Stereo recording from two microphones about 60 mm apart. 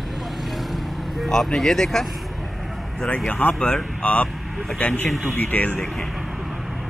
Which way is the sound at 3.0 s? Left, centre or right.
Centre.